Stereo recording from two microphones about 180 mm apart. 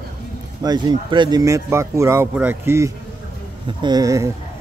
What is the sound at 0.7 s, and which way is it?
Speech, 25° right (ahead or behind).